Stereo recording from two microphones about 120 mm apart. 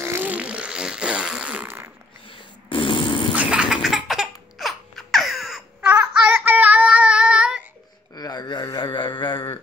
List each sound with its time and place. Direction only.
0.0 s fart: 20° right (ahead or behind)
2.2 s fart: 45° left (ahead or behind)
3.3 s baby laughter: 5° right (ahead or behind)
5.9 s child singing: 15° right (ahead or behind)
8.1 s a sound: 35° left (ahead or behind)